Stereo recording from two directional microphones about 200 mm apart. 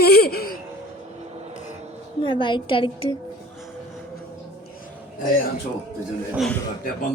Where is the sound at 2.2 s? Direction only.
25° left (ahead or behind).